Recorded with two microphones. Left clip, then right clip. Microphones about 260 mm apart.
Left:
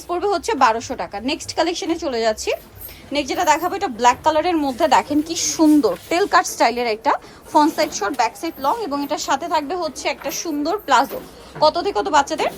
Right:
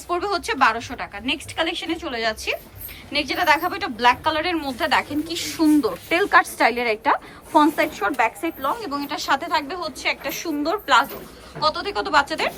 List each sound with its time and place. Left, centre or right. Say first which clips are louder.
0.1 s a woman's voice: left 3 dB; centre